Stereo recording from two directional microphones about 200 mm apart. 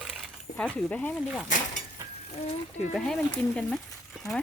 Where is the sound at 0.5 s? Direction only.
5° left (ahead or behind).